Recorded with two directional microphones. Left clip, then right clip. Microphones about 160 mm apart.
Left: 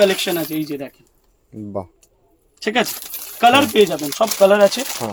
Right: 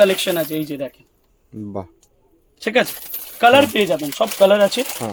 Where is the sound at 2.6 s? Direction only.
35° right (ahead or behind).